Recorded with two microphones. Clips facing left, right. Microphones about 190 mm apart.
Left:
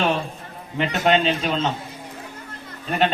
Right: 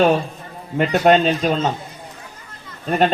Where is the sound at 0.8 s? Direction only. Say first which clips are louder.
Right 5 dB; 45° right (ahead or behind).